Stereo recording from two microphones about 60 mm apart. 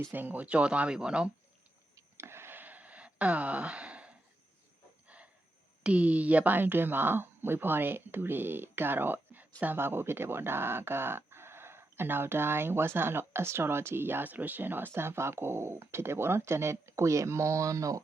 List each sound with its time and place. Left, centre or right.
0.1 s speech: right
2.1 s a sound: right
5.8 s speech: centre; by 18.0 s right